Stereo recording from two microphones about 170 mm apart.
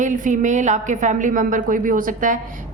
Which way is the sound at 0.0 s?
50° right (ahead or behind).